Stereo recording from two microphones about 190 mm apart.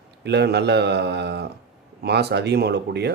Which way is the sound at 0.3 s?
60° right (ahead or behind).